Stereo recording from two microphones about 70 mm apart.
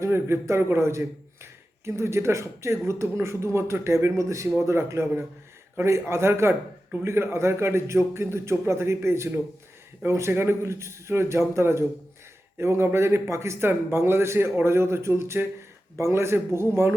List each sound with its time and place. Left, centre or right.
0.0 s a man's voice: right